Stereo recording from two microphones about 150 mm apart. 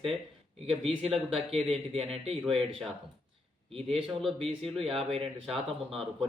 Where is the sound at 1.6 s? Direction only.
40° right (ahead or behind).